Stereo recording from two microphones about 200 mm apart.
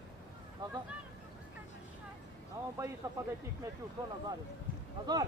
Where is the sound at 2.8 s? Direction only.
15° right (ahead or behind).